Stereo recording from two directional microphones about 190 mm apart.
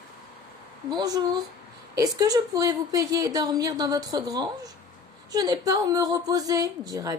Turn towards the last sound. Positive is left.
turn(degrees=-20)  # may be behind; listen again after turning